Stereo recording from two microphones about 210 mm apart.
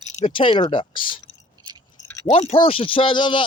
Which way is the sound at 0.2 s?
25° left (ahead or behind).